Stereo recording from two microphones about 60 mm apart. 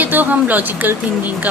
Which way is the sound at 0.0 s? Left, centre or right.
Right.